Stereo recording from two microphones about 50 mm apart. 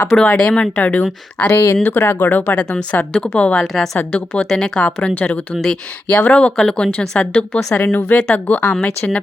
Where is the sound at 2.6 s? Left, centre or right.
Left.